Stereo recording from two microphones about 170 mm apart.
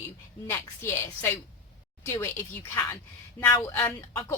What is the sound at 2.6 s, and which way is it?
A woman's voice, 20° left (ahead or behind).